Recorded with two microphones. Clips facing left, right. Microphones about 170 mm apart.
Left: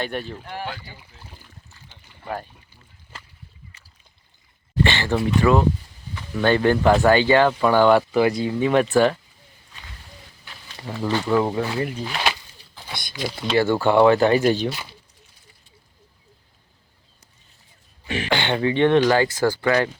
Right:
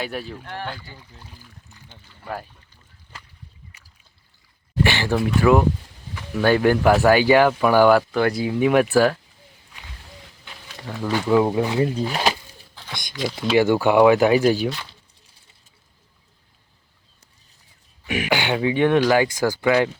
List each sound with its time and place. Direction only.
0.0 s speech: centre (ahead or behind); by 1.0 s 15° left (ahead or behind)
3.7 s boat: 15° right (ahead or behind)
4.8 s speech: 10° right (ahead or behind)
10.8 s speech: centre (ahead or behind); by 11.9 s 20° right (ahead or behind)
12.0 s speech: 40° right (ahead or behind)
13.1 s speech: centre (ahead or behind)
13.6 s speech: 15° right (ahead or behind)
14.7 s speech: 10° left (ahead or behind)
18.1 s speech: 10° right (ahead or behind)